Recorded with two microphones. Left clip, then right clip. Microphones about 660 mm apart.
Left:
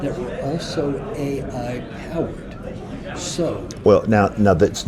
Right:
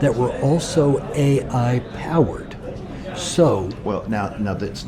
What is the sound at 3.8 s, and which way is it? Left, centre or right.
Speech, left.